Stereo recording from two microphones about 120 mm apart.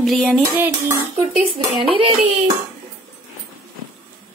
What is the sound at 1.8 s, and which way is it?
Speech, 50° right (ahead or behind).